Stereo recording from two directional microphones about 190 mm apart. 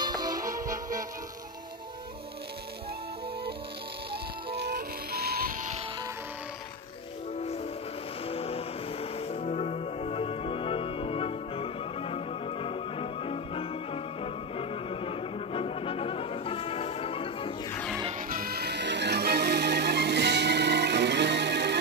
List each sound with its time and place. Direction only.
0.0 s music: 20° right (ahead or behind)
4.1 s music: 60° right (ahead or behind)
8.3 s vehicle: 30° left (ahead or behind)
9.3 s music: 35° left (ahead or behind)
17.6 s music: 5° left (ahead or behind)
18.3 s music: 55° right (ahead or behind)